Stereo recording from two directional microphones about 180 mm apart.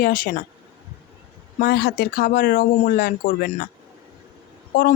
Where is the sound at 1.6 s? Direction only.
65° left (ahead or behind).